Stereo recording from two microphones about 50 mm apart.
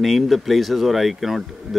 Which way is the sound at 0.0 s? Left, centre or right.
Centre.